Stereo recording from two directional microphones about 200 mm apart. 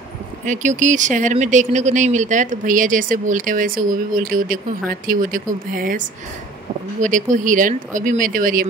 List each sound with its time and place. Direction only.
0.5 s speech: 40° right (ahead or behind)